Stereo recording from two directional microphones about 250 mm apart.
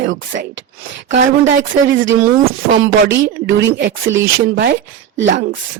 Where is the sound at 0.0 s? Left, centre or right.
Right.